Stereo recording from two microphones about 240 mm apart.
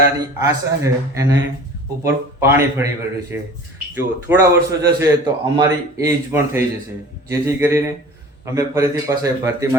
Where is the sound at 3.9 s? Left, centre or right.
Centre.